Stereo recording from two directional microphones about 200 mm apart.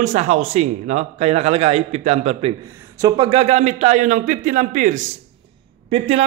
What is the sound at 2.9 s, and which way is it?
A man's voice, 20° right (ahead or behind).